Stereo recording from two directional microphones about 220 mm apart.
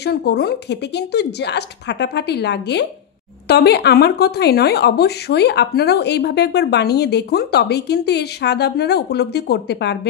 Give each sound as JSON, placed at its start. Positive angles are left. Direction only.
{"t": 0.0, "sound": "speech", "side_deg": 50}